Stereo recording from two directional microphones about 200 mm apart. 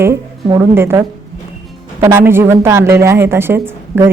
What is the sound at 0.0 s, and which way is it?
A woman's voice, 15° right (ahead or behind).